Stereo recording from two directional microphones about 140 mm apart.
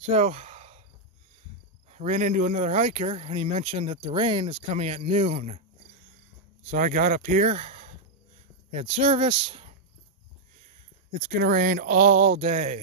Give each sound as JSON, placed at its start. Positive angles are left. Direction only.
{"t": 0.0, "sound": "a sound", "side_deg": -45}
{"t": 1.9, "sound": "speech", "side_deg": -55}
{"t": 6.7, "sound": "speech", "side_deg": -70}
{"t": 11.3, "sound": "speech", "side_deg": -85}